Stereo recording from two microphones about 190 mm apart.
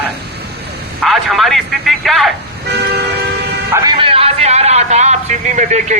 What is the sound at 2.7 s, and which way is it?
Vehicle, 60° right (ahead or behind).